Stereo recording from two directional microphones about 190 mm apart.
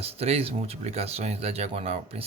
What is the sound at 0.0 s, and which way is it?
Speech, 30° right (ahead or behind).